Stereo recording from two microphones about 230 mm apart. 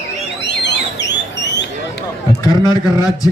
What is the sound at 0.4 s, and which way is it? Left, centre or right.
Alarm, left.